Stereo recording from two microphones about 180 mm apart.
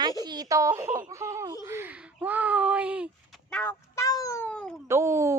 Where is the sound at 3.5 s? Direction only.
10° left (ahead or behind).